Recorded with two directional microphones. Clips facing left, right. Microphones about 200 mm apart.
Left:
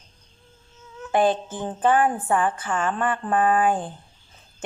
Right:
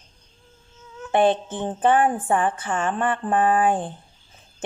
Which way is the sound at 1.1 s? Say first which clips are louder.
Right 2 dB; 25° right (ahead or behind).